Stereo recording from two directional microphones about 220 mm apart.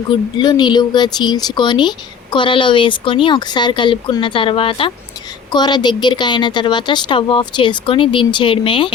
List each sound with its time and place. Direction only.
0.1 s speech: 20° left (ahead or behind)